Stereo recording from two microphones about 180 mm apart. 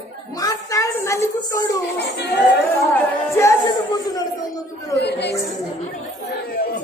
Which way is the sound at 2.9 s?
10° left (ahead or behind).